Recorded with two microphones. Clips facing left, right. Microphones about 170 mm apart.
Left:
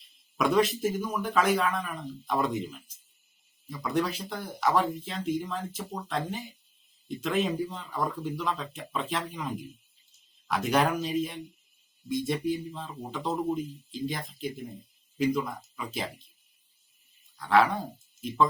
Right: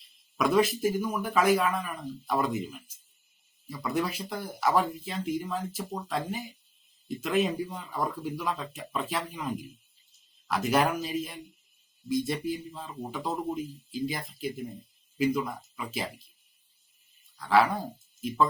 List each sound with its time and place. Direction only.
0.0 s speech: centre (ahead or behind)
17.3 s speech: centre (ahead or behind)